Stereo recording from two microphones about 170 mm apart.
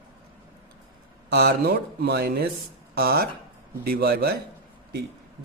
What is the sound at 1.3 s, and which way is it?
A man's voice, 70° right (ahead or behind).